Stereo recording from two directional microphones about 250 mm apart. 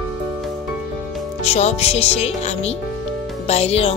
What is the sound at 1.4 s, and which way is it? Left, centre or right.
Speech, left.